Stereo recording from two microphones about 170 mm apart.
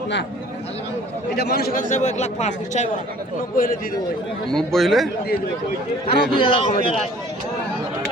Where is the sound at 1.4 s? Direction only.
65° left (ahead or behind); by 3.0 s 45° left (ahead or behind).